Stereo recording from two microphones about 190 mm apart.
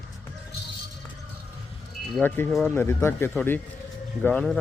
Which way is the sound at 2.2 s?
10° left (ahead or behind).